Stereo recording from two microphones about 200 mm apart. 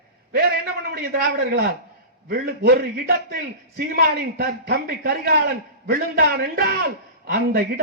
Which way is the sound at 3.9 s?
50° right (ahead or behind).